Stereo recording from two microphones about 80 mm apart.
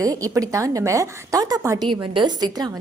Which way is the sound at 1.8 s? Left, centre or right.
Right.